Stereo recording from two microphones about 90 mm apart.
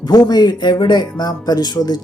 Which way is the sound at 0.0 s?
50° left (ahead or behind).